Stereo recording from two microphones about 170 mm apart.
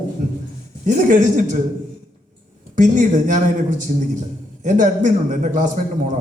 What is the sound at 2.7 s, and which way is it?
A man's voice, 50° right (ahead or behind).